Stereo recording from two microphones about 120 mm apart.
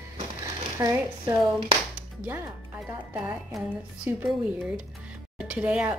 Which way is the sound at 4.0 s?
15° right (ahead or behind).